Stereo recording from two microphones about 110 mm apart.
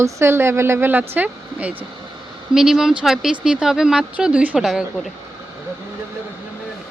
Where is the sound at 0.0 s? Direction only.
25° right (ahead or behind); by 5.1 s centre (ahead or behind).